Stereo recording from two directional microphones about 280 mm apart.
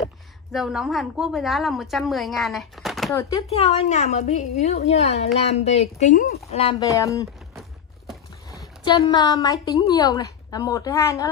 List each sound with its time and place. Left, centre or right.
0.5 s a woman's voice: centre
3.3 s a woman's voice: left
8.5 s a woman's voice: centre